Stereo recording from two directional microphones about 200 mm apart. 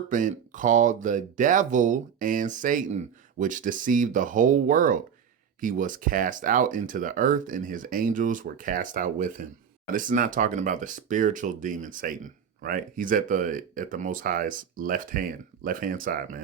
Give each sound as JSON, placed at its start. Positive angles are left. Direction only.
{"t": 0.1, "sound": "speech", "side_deg": -40}